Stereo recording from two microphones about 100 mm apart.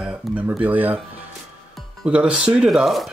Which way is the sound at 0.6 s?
15° right (ahead or behind).